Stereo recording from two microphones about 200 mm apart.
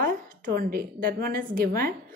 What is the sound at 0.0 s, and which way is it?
A woman's voice, 50° right (ahead or behind).